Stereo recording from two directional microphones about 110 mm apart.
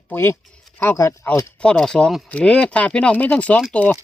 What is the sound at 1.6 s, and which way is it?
Speech, 5° left (ahead or behind).